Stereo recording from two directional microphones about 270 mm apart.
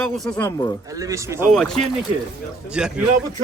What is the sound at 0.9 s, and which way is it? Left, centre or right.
Speech, centre.